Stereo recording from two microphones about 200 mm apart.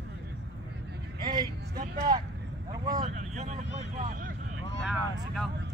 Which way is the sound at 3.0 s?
40° right (ahead or behind).